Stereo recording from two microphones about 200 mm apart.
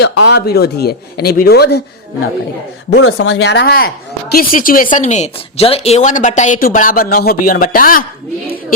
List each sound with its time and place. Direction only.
0.0 s speech: 60° left (ahead or behind)
2.9 s speech: 75° left (ahead or behind); by 8.0 s 45° left (ahead or behind)